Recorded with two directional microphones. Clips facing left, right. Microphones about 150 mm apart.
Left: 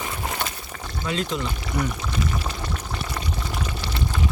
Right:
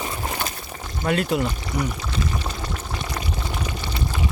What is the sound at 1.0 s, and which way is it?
Speech, 55° right (ahead or behind).